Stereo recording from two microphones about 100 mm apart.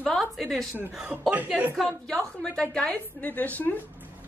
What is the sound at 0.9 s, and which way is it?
Speech, 10° right (ahead or behind).